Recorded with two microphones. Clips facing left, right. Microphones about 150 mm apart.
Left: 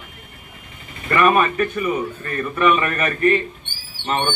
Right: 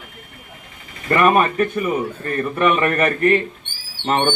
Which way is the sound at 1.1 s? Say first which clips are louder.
Right 1 dB; 30° right (ahead or behind).